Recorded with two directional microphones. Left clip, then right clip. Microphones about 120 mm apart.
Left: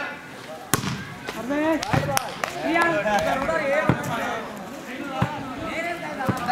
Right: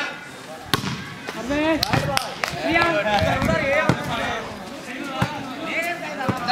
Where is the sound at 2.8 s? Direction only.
30° right (ahead or behind).